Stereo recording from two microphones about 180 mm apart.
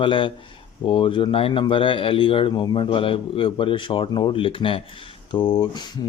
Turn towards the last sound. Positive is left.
turn(degrees=25)  # may be behind; listen again after turning